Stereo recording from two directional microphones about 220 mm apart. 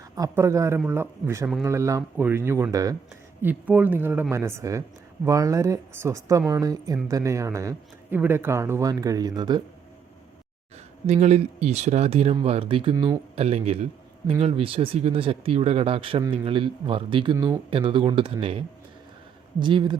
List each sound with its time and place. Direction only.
0.2 s speech: 15° right (ahead or behind)
11.0 s speech: 30° right (ahead or behind)
17.3 s speech: 10° right (ahead or behind)
17.7 s speech: 25° right (ahead or behind)